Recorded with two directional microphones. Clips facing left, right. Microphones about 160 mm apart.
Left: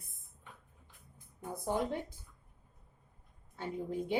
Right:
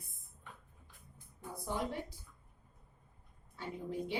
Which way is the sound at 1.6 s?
50° left (ahead or behind).